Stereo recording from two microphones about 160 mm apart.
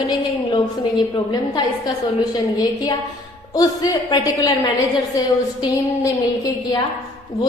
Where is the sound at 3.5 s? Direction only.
25° left (ahead or behind).